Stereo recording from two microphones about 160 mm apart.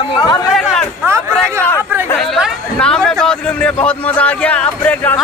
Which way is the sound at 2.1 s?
Centre (ahead or behind).